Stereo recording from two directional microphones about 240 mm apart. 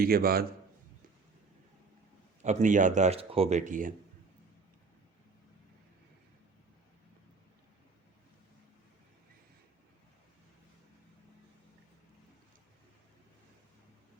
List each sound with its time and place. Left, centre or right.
0.0 s a man's voice: right
2.4 s speech: right